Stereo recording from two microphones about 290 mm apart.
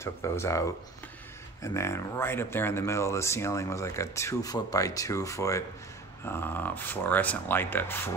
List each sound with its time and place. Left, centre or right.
0.0 s speech: centre